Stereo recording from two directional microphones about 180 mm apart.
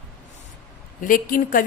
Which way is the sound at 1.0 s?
50° left (ahead or behind).